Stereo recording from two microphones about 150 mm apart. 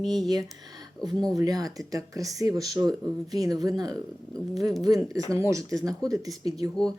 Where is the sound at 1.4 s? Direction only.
25° right (ahead or behind).